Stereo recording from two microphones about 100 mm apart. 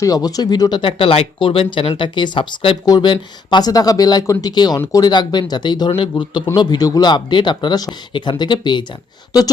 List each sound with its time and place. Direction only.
0.0 s speech: 40° left (ahead or behind)